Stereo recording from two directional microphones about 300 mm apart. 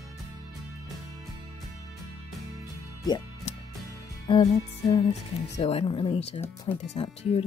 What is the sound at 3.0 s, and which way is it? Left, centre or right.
Music, centre.